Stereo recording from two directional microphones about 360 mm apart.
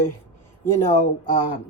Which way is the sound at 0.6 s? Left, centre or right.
Centre.